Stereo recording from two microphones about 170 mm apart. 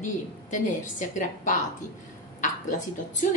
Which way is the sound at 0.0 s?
45° left (ahead or behind).